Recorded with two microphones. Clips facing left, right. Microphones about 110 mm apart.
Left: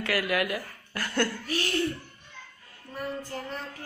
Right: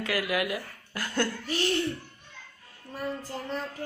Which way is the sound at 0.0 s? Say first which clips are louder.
Left 1 dB; 15° right (ahead or behind).